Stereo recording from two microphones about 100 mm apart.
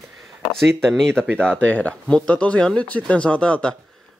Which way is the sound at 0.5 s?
Centre (ahead or behind).